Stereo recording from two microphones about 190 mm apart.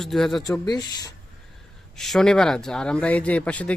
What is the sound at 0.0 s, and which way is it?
Speech, centre (ahead or behind).